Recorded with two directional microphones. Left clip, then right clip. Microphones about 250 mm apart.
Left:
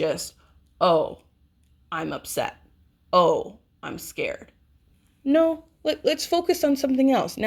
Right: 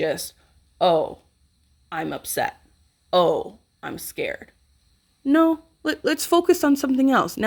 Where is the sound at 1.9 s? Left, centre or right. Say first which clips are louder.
Right 1 dB; right.